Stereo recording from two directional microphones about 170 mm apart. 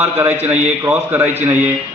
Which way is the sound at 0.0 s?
10° right (ahead or behind).